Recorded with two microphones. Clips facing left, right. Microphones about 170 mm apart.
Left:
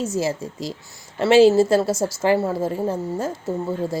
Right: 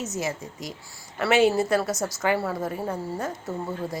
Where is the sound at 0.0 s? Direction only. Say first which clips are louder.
Left 7 dB; 30° left (ahead or behind).